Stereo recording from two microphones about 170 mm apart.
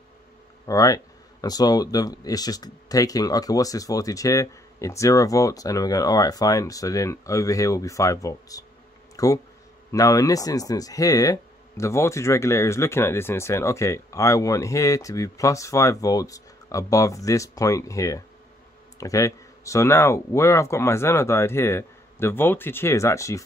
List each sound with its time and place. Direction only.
0.7 s speech: 20° left (ahead or behind)